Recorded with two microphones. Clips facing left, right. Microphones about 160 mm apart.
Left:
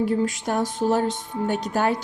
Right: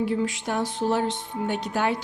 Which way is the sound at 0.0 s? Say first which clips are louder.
Left 3 dB; 45° left (ahead or behind).